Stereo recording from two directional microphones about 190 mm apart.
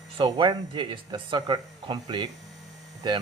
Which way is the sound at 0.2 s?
25° right (ahead or behind).